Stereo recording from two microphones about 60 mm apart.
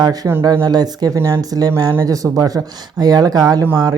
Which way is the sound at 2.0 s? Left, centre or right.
Right.